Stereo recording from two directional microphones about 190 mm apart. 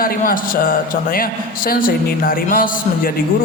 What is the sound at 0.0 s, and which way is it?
Speech, 50° left (ahead or behind).